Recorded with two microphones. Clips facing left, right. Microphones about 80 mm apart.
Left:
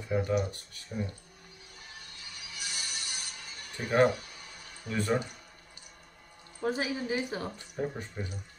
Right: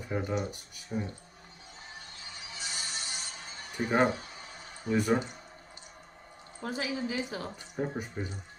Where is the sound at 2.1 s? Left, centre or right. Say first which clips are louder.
Right 2 dB; right.